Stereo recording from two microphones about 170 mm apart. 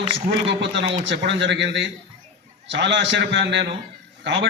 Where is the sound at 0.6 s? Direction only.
90° right.